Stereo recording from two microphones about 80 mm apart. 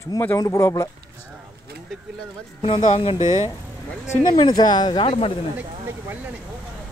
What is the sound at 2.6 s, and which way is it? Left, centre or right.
Speech, left.